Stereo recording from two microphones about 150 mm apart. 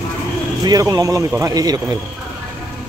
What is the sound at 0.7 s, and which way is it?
A man's voice, 25° right (ahead or behind).